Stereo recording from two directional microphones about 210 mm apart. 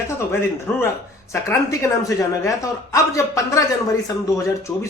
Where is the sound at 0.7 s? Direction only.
5° left (ahead or behind).